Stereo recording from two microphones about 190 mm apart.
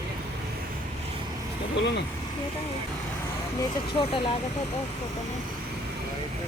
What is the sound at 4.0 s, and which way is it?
Speech, 25° left (ahead or behind).